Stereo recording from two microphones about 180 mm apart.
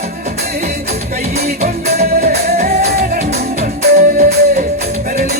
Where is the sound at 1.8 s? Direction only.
60° right (ahead or behind).